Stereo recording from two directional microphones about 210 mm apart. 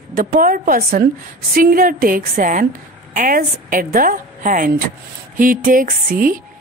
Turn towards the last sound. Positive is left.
turn(degrees=-40)  # may be behind; listen again after turning